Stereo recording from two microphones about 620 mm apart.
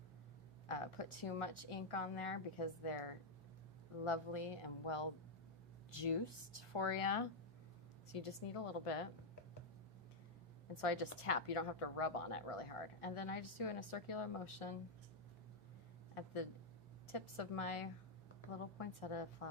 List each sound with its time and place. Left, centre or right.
0.7 s a woman's voice: left
6.7 s a woman's voice: left
10.8 s a woman's voice: left
16.1 s a woman's voice: left
18.8 s a woman's voice: left